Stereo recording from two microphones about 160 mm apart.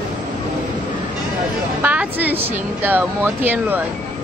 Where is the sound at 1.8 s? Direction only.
10° right (ahead or behind).